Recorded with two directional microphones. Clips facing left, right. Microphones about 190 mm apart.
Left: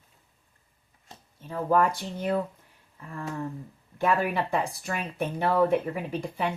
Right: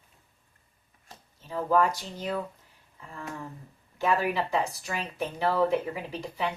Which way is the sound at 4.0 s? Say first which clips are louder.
Left 1 dB; 55° left (ahead or behind).